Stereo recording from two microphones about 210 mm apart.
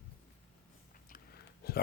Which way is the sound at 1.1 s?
45° left (ahead or behind).